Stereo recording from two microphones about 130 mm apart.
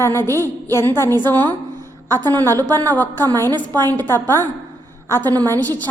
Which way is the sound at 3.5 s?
30° right (ahead or behind).